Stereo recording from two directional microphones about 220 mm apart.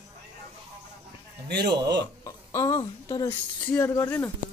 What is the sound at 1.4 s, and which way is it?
Speech, 50° right (ahead or behind).